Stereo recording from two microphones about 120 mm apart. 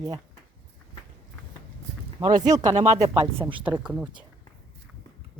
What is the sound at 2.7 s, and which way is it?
Speech, 70° right (ahead or behind).